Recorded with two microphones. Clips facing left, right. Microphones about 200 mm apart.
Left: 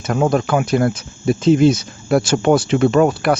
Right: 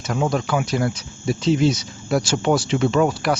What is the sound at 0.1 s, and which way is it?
Speech, 55° left (ahead or behind).